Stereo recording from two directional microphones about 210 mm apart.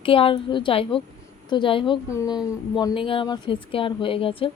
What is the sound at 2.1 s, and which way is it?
Speech, 15° left (ahead or behind).